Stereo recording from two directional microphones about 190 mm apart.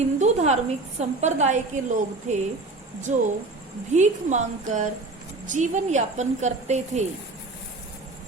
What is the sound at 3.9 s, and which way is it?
A woman's voice, 40° right (ahead or behind).